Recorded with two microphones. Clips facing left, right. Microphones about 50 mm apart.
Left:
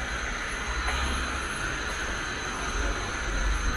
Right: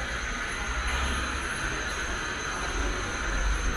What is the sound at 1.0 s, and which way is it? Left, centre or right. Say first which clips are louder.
Vehicle: even; centre.